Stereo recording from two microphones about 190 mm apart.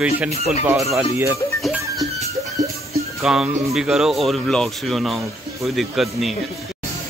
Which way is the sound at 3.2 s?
Centre (ahead or behind).